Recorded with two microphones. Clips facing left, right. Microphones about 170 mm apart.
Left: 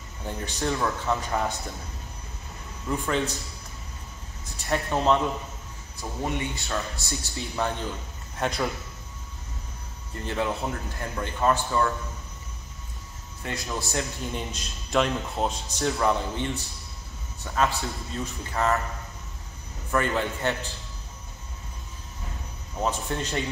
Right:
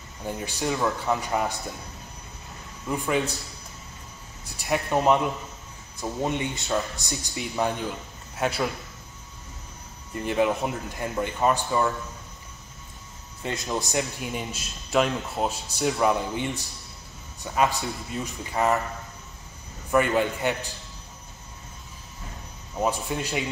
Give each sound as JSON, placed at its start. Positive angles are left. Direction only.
{"t": 0.3, "sound": "a man's voice", "side_deg": -10}
{"t": 2.9, "sound": "a man's voice", "side_deg": -15}
{"t": 4.6, "sound": "a man's voice", "side_deg": -15}
{"t": 8.4, "sound": "a man's voice", "side_deg": -5}
{"t": 10.1, "sound": "a man's voice", "side_deg": -15}
{"t": 13.4, "sound": "a man's voice", "side_deg": -20}
{"t": 19.9, "sound": "a man's voice", "side_deg": -15}
{"t": 22.8, "sound": "a man's voice", "side_deg": -10}